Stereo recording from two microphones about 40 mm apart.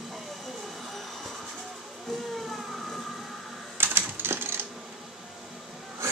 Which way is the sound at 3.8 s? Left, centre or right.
Right.